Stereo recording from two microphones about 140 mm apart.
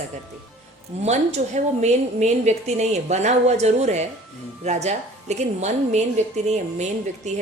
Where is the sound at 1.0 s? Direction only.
50° right (ahead or behind).